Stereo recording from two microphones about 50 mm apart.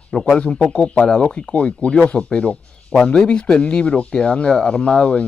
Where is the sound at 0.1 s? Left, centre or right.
Centre.